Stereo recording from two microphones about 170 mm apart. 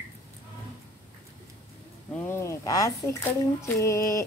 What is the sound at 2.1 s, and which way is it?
Speech, 15° left (ahead or behind).